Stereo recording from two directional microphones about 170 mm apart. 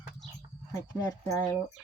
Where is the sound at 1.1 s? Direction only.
15° left (ahead or behind).